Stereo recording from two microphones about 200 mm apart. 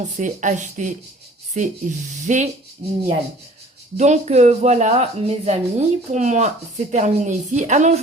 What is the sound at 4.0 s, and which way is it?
Speech, 35° right (ahead or behind).